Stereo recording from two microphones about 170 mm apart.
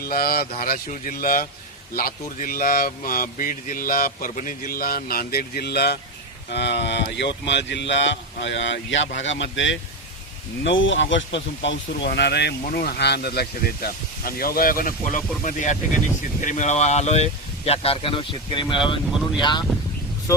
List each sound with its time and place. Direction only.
0.0 s speech: 65° left (ahead or behind)
6.5 s speech: 80° left; by 19.6 s 25° left (ahead or behind)